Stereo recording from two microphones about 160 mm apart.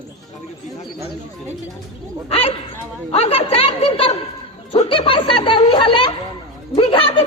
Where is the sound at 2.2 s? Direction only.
40° left (ahead or behind).